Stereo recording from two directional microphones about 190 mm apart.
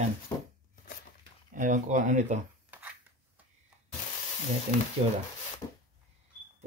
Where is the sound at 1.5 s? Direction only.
40° right (ahead or behind).